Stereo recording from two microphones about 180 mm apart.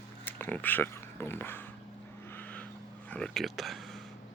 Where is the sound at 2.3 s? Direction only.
10° left (ahead or behind).